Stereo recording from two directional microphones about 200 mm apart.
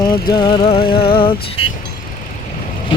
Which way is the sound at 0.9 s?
50° left (ahead or behind).